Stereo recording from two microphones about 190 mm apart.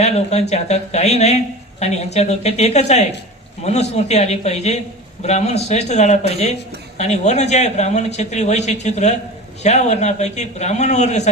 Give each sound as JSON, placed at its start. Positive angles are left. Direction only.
{"t": 0.0, "sound": "a man's voice", "side_deg": 35}